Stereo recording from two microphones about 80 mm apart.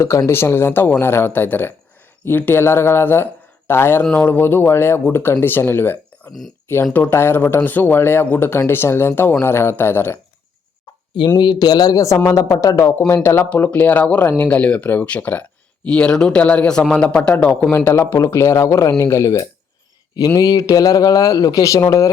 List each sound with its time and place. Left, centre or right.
0.3 s speech: left
11.3 s a man's voice: left
13.5 s speech: centre
17.7 s speech: left
20.1 s a man's voice: left